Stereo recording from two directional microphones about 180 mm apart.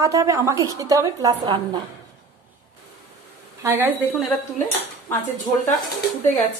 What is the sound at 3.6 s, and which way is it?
Speech, 10° right (ahead or behind).